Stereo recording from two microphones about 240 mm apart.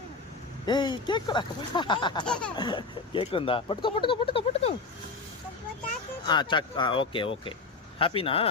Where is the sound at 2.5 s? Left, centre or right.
Centre.